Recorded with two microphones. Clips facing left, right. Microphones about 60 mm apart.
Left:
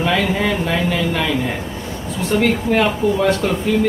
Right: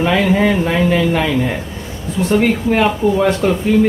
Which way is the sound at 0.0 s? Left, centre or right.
Centre.